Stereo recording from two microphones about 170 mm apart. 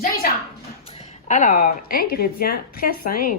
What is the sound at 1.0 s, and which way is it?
A woman's voice, 45° left (ahead or behind).